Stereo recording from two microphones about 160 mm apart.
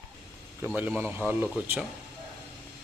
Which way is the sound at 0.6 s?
20° right (ahead or behind).